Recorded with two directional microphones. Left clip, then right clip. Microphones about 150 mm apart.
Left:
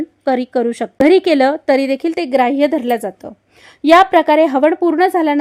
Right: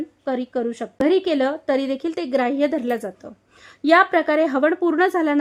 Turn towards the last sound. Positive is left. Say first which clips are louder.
# left 5 dB
turn(degrees=5)  # may be behind; listen again after turning